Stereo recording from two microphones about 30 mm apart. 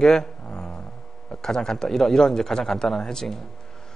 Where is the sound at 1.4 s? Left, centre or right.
Centre.